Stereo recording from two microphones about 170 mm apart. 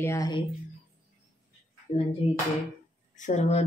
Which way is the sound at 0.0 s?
15° left (ahead or behind).